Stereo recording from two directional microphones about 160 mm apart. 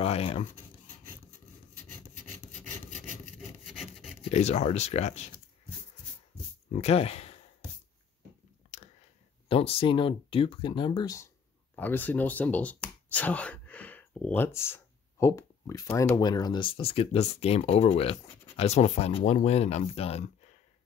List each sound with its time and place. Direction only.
0.0 s a sound: 40° left (ahead or behind)
4.2 s speech: 45° left (ahead or behind)
6.7 s speech: 40° left (ahead or behind)
8.7 s a sound: 50° left (ahead or behind)
9.5 s speech: 35° left (ahead or behind)
11.7 s speech: 10° left (ahead or behind); by 20.2 s 40° left (ahead or behind)